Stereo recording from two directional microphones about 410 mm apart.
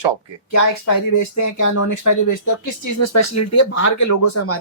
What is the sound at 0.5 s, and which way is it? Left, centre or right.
Speech, left.